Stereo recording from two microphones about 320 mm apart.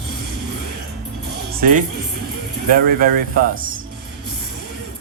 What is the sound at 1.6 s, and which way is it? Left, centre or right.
A man's voice, right.